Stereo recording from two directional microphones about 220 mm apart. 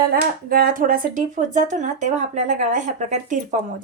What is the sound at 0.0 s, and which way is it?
A woman's voice, 40° right (ahead or behind).